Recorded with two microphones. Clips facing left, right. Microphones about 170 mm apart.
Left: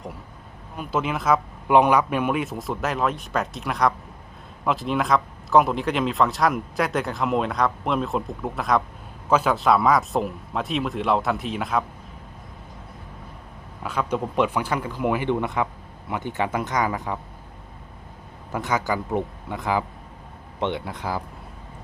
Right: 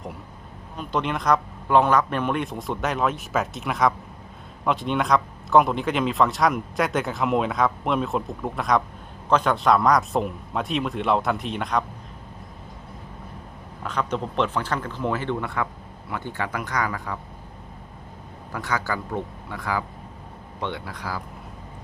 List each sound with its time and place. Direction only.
0.8 s speech: 5° left (ahead or behind)
1.6 s speech: 15° left (ahead or behind)
13.8 s speech: 10° left (ahead or behind)
18.5 s speech: 20° left (ahead or behind)